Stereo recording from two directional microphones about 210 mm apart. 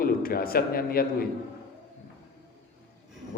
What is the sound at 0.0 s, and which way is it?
A man's voice, 45° left (ahead or behind).